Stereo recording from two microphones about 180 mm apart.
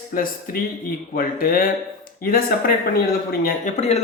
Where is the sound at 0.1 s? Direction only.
50° left (ahead or behind).